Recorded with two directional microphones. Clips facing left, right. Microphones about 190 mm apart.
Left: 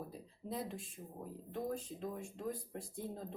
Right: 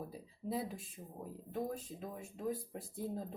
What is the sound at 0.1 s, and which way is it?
Speech, 5° right (ahead or behind).